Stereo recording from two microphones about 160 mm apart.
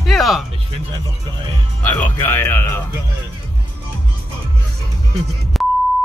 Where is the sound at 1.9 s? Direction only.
10° left (ahead or behind).